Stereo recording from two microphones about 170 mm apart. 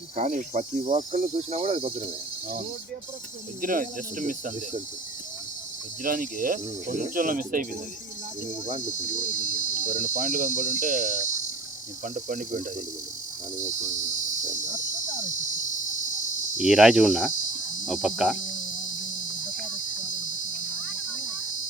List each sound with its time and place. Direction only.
0.2 s cricket: 50° right (ahead or behind)
3.6 s cricket: 55° right (ahead or behind)
6.0 s cricket: 55° right (ahead or behind)
15.8 s cricket: 50° left (ahead or behind)
16.6 s speech: centre (ahead or behind)